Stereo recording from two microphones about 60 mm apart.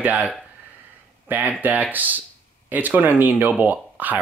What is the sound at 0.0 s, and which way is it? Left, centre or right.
Speech, right.